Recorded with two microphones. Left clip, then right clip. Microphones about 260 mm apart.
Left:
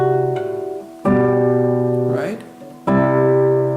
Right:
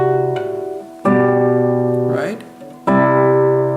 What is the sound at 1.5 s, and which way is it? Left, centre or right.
Music, centre.